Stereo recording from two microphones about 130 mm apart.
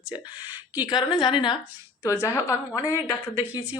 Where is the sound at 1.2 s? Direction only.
35° left (ahead or behind).